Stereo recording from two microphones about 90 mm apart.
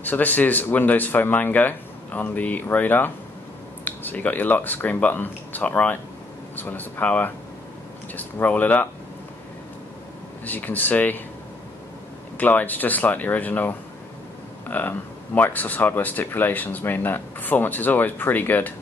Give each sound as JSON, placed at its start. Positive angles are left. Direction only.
{"t": 0.0, "sound": "speech", "side_deg": 20}
{"t": 10.4, "sound": "speech", "side_deg": 20}
{"t": 12.4, "sound": "speech", "side_deg": 20}